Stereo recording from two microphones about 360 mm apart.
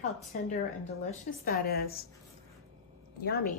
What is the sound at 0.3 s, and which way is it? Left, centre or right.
A woman's voice, left.